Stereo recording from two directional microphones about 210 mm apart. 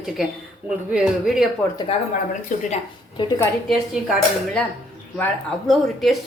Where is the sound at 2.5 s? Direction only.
40° left (ahead or behind).